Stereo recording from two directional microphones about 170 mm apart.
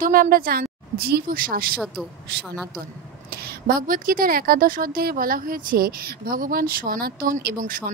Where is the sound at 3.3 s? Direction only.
65° right (ahead or behind).